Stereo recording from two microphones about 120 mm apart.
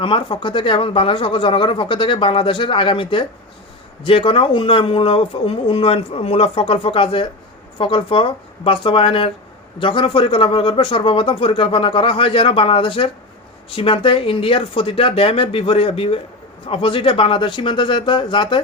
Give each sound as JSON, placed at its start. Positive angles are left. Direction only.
{"t": 0.0, "sound": "speech", "side_deg": 45}